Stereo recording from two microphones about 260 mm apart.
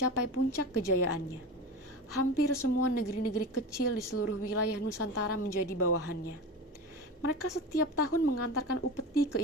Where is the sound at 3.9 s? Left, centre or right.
Left.